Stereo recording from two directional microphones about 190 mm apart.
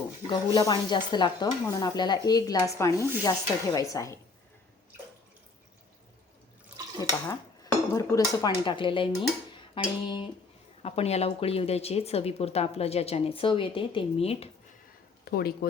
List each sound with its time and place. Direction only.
0.3 s stir: 20° left (ahead or behind)
3.2 s speech: 20° left (ahead or behind)
7.0 s dishes: 20° left (ahead or behind)
9.7 s stir: 25° left (ahead or behind)
10.8 s a woman's voice: 35° left (ahead or behind)
15.2 s speech: 55° left (ahead or behind)